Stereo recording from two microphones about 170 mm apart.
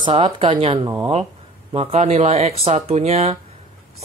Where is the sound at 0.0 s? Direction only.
35° right (ahead or behind).